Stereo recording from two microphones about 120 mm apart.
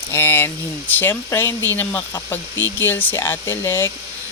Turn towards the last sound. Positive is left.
turn(degrees=20)  # may be behind; listen again after turning